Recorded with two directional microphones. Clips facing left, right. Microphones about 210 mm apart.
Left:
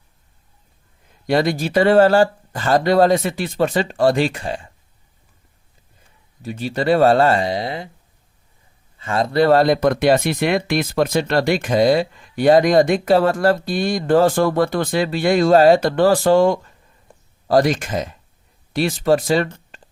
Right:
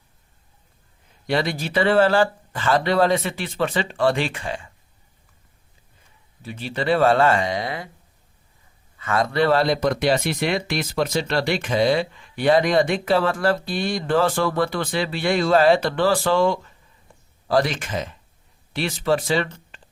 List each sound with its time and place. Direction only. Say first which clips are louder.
1.3 s speech: left 5 dB; 45° left (ahead or behind)
6.4 s speech: left 5 dB; 40° left (ahead or behind)
9.0 s speech: left 3 dB; 30° left (ahead or behind)